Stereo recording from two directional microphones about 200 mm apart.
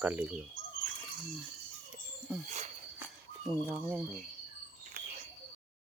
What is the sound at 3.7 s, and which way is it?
Speech, 5° right (ahead or behind).